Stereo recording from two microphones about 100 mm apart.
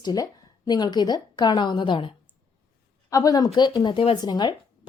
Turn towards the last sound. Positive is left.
turn(degrees=45)  # may be behind; listen again after turning